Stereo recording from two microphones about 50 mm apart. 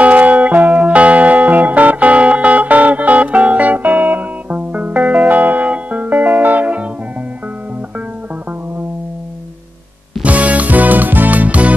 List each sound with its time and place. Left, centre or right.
0.0 s music: right
10.2 s music: right